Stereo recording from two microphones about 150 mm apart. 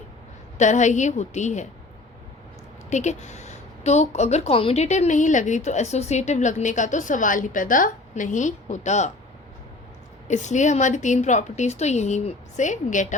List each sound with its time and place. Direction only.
0.6 s a woman's voice: 55° left (ahead or behind)
2.9 s a woman's voice: 50° left (ahead or behind)
10.2 s a woman's voice: 55° left (ahead or behind)